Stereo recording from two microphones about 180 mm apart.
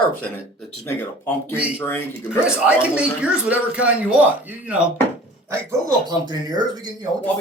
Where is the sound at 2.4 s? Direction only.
5° right (ahead or behind).